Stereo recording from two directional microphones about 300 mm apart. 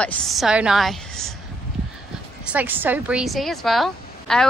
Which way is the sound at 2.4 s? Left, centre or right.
Centre.